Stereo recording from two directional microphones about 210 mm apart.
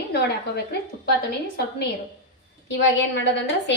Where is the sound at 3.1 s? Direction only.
55° left (ahead or behind).